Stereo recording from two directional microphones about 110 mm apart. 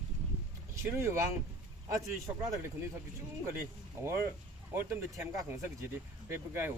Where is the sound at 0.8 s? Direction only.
25° right (ahead or behind).